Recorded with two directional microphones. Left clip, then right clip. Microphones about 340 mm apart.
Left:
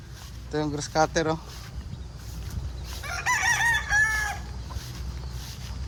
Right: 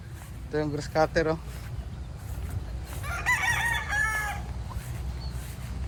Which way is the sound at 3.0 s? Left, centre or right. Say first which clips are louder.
Left 2 dB; left.